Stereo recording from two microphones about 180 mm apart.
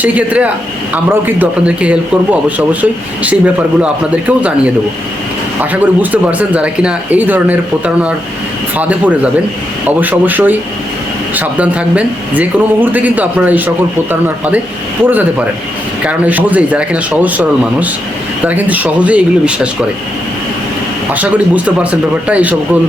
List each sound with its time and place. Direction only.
0.0 s speech: 10° right (ahead or behind)
5.7 s speech: 10° right (ahead or behind)
15.0 s speech: 10° right (ahead or behind)
21.1 s speech: 10° right (ahead or behind)